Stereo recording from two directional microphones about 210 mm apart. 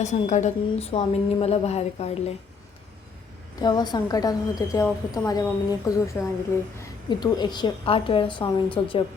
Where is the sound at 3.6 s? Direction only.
20° left (ahead or behind).